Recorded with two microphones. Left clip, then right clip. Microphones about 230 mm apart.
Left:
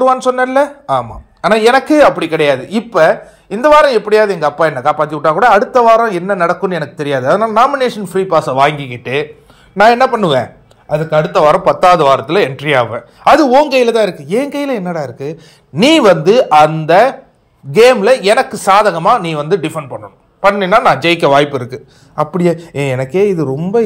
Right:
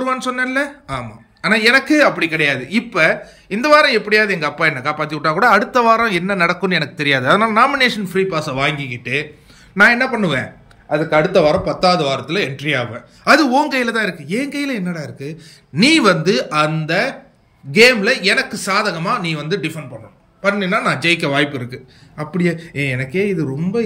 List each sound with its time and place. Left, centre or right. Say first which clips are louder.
0.2 s speech: left 8 dB; centre
5.3 s a man's voice: left 4 dB; right
6.5 s speech: left 3 dB; centre
7.2 s a man's voice: left 4 dB; right
7.7 s speech: left 2 dB; centre
9.9 s a man's voice: left 7 dB; left
10.9 s a man's voice: left 2 dB; left
11.3 s speech: left 5 dB; centre